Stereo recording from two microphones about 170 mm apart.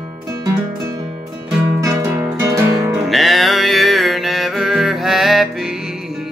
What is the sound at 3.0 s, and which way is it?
Music, centre (ahead or behind).